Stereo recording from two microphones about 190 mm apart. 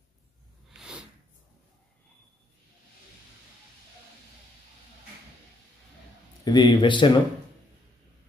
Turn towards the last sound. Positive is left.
turn(degrees=25)  # may be behind; listen again after turning